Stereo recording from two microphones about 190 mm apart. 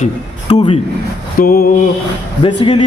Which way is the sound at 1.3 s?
50° left (ahead or behind).